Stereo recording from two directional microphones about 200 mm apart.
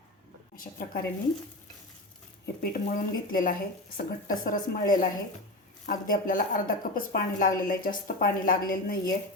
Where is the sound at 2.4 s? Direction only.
45° left (ahead or behind).